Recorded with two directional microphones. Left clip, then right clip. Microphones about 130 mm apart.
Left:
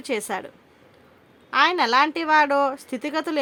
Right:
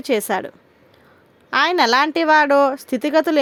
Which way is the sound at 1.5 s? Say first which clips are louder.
Right 3 dB; 55° right (ahead or behind).